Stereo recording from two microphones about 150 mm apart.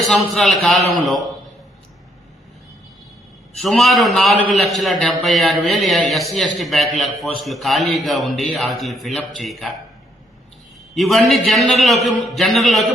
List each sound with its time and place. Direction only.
0.1 s a man's voice: centre (ahead or behind)
3.5 s a man's voice: centre (ahead or behind)
10.9 s a man's voice: centre (ahead or behind)